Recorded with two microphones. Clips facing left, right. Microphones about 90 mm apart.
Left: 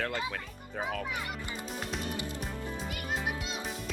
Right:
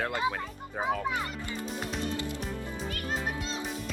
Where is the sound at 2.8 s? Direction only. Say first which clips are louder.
Right 2 dB; 10° left (ahead or behind).